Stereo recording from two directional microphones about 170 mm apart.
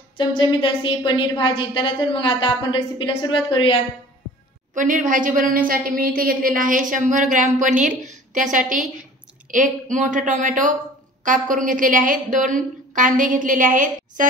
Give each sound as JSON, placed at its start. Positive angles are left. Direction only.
{"t": 0.2, "sound": "a woman's voice", "side_deg": 25}
{"t": 4.7, "sound": "a woman's voice", "side_deg": -50}